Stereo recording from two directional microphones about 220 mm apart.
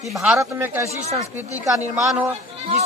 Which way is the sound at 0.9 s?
30° right (ahead or behind).